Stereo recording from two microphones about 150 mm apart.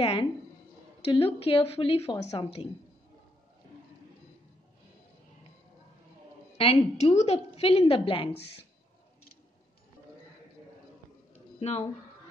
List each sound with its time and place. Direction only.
0.0 s a woman's voice: 40° left (ahead or behind)
6.6 s a woman's voice: 40° left (ahead or behind)
11.3 s a sound: 45° left (ahead or behind)